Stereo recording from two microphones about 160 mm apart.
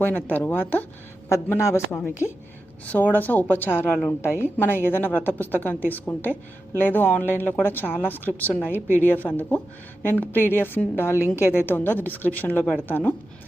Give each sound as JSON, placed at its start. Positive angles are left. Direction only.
{"t": 0.0, "sound": "a woman's voice", "side_deg": 10}